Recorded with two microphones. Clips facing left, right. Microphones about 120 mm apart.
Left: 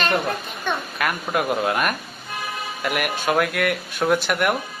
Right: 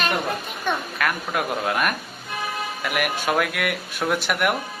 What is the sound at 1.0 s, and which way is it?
A man's voice, 5° left (ahead or behind).